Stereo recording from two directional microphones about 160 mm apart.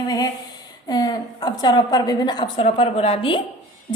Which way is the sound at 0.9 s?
25° left (ahead or behind).